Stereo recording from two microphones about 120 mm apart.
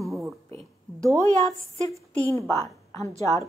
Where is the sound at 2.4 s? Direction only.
25° left (ahead or behind).